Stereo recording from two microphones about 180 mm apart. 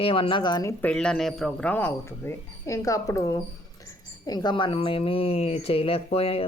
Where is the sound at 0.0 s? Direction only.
30° left (ahead or behind).